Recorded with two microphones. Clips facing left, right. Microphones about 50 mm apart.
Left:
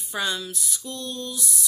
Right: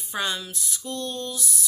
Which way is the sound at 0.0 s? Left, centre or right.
Right.